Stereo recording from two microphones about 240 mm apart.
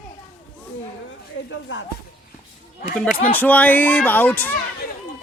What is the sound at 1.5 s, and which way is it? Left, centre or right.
Speech, left.